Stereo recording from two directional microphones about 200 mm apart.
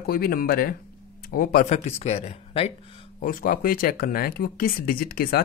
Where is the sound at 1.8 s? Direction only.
35° left (ahead or behind).